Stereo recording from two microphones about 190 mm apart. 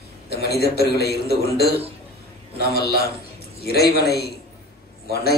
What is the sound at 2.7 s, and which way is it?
A man's voice, 55° left (ahead or behind).